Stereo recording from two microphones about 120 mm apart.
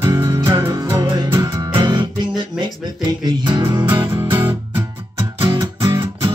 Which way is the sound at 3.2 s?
40° right (ahead or behind).